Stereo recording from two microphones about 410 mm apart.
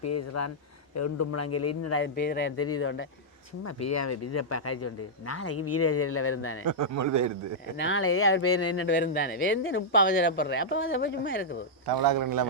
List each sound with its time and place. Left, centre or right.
0.0 s a man's voice: left
3.6 s a man's voice: left
6.7 s a man's voice: right
7.8 s speech: left
11.9 s a man's voice: right